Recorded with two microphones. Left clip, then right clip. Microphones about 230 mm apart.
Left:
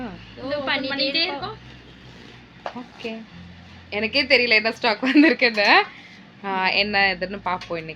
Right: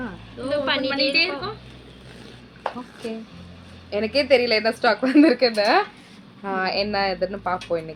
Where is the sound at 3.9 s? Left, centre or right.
Centre.